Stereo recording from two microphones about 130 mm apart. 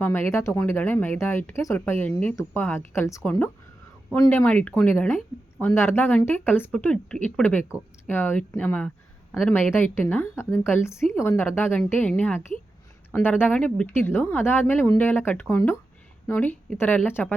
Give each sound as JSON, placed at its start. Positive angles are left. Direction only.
{"t": 0.0, "sound": "speech", "side_deg": 20}